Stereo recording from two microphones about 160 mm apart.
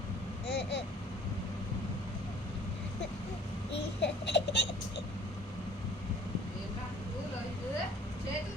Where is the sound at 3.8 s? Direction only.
90° left.